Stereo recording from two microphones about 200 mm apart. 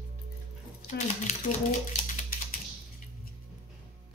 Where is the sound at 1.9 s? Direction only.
40° left (ahead or behind).